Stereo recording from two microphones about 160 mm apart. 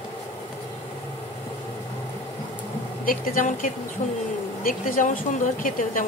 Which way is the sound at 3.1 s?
60° left (ahead or behind).